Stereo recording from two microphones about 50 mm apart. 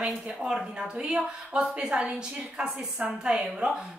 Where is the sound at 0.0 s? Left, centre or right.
Centre.